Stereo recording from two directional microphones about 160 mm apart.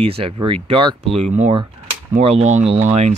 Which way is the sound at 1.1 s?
45° right (ahead or behind).